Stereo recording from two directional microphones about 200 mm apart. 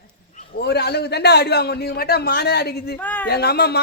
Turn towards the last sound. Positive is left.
turn(degrees=55)  # may be behind; listen again after turning